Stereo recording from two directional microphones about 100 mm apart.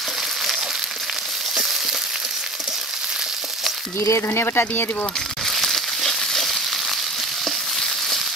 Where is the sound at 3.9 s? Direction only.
30° left (ahead or behind).